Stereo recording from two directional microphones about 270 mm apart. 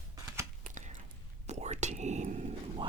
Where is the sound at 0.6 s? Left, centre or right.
Right.